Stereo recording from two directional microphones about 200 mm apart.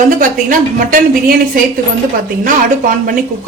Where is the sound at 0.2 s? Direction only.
45° right (ahead or behind).